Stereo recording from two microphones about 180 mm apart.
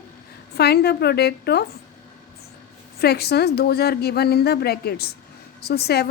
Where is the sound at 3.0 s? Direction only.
60° left (ahead or behind).